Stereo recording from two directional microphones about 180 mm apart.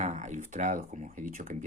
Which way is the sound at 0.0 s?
40° right (ahead or behind).